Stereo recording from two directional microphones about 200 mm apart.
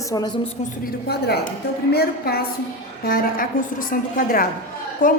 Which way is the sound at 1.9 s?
50° left (ahead or behind).